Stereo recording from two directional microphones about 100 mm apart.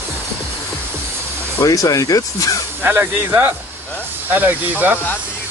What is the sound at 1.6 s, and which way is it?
Speech, 35° left (ahead or behind).